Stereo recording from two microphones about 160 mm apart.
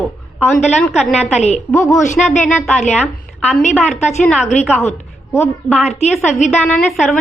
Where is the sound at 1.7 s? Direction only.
20° left (ahead or behind).